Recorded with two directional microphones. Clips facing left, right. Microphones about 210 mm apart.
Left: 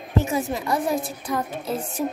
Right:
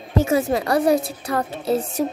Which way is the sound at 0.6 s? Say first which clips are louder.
Right 6 dB; 75° right (ahead or behind).